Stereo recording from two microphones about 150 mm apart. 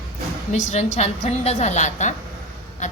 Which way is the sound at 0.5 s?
50° left (ahead or behind).